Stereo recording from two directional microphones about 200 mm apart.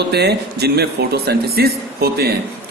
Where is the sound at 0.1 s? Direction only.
55° right (ahead or behind).